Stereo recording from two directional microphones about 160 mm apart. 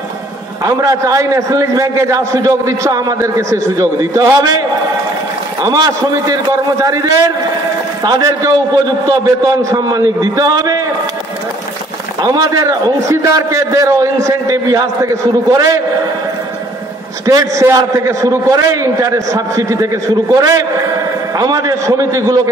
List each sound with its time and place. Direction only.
0.7 s a man's voice: 20° right (ahead or behind)
12.2 s a man's voice: 25° right (ahead or behind)
17.3 s a man's voice: 20° right (ahead or behind)